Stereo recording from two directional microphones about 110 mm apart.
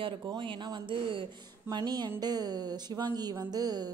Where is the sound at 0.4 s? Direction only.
45° right (ahead or behind).